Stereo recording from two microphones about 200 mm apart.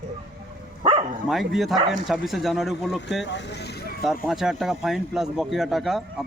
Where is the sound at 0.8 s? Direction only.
25° right (ahead or behind).